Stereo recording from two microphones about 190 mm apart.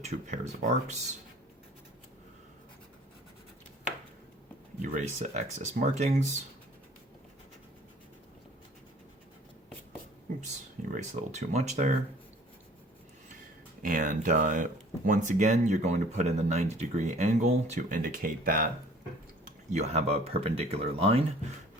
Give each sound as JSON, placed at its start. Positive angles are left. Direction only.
{"t": 0.0, "sound": "speech", "side_deg": -40}
{"t": 4.8, "sound": "speech", "side_deg": -40}
{"t": 10.9, "sound": "speech", "side_deg": -40}
{"t": 13.8, "sound": "speech", "side_deg": -45}
{"t": 19.7, "sound": "speech", "side_deg": -35}